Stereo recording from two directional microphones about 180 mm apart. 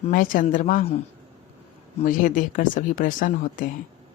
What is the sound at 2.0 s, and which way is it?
Speech, 50° left (ahead or behind).